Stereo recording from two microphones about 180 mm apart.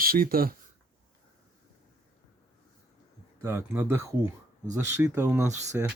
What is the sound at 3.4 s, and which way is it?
Speech, 15° right (ahead or behind).